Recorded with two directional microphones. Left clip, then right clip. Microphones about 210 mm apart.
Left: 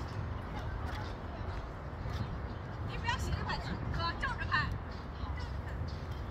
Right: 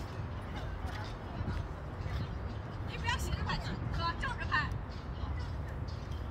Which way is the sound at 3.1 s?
15° right (ahead or behind).